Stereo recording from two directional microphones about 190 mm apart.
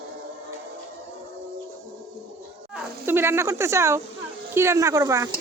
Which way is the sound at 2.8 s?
10° right (ahead or behind).